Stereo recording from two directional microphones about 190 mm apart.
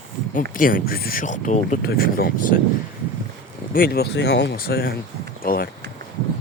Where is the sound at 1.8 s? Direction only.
55° left (ahead or behind).